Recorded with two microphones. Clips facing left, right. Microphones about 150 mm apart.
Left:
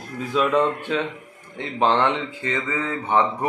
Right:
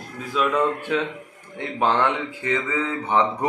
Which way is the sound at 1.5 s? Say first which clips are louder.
Left 1 dB; 20° left (ahead or behind).